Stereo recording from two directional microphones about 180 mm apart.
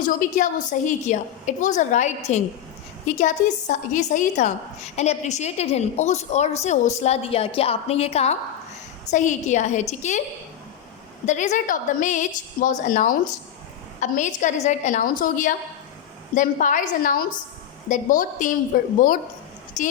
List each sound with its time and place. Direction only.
0.0 s a woman's voice: 45° left (ahead or behind)
11.3 s a woman's voice: 45° left (ahead or behind)